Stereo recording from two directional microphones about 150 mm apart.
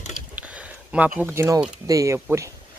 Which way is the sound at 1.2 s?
15° right (ahead or behind).